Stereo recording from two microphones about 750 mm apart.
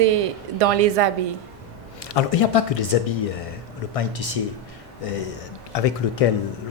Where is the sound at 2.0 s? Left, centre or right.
Left.